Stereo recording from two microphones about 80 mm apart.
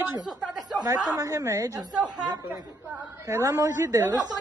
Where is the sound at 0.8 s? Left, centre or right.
Right.